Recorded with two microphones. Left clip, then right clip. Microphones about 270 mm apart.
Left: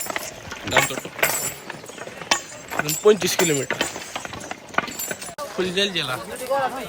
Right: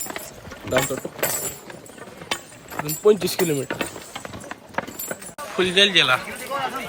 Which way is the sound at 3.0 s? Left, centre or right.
Centre.